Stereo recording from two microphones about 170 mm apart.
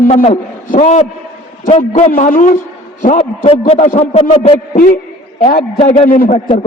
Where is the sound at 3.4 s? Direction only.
35° left (ahead or behind).